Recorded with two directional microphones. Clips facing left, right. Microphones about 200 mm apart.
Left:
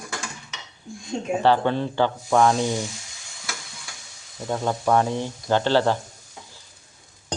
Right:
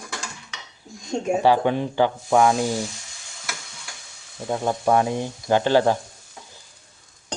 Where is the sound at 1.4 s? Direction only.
15° right (ahead or behind).